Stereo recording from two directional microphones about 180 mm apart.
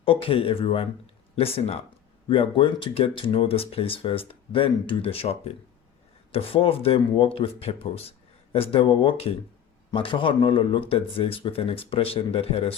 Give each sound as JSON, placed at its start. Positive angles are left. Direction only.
{"t": 0.0, "sound": "speech", "side_deg": 30}